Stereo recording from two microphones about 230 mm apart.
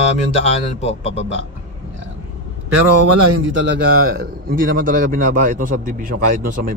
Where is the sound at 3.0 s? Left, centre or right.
Right.